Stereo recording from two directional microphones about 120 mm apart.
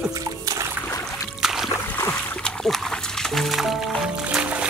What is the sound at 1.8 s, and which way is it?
Music, 15° left (ahead or behind).